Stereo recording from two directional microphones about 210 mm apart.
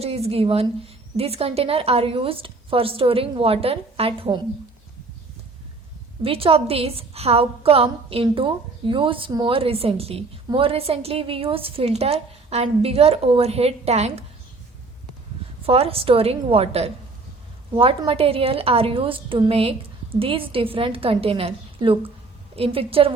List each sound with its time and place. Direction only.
0.0 s a woman's voice: 30° right (ahead or behind)
6.2 s a woman's voice: 25° right (ahead or behind)
15.6 s a woman's voice: 25° right (ahead or behind)